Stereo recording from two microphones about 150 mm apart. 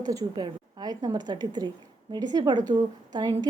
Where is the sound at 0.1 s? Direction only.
25° right (ahead or behind).